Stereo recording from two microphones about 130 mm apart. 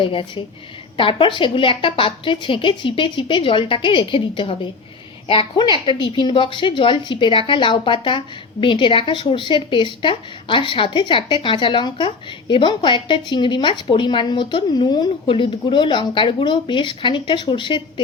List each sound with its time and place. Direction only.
0.0 s speech: 40° left (ahead or behind)